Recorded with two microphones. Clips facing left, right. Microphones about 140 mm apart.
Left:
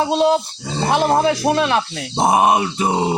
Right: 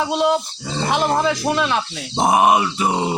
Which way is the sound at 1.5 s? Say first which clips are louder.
Left 3 dB; 50° left (ahead or behind).